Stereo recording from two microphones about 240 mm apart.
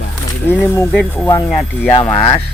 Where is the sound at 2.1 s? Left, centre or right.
Left.